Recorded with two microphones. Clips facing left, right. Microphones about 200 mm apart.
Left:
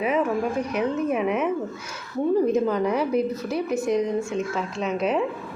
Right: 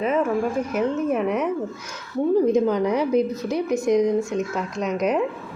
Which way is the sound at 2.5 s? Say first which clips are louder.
Right 2 dB; centre (ahead or behind).